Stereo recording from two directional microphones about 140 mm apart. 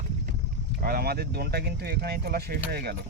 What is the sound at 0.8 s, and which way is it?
Speech, 90° right.